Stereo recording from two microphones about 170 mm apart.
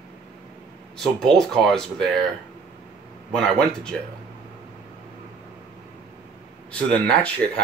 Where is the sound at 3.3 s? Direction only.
5° left (ahead or behind).